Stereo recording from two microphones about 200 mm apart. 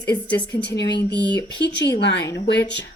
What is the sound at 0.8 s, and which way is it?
Speech, 60° left (ahead or behind).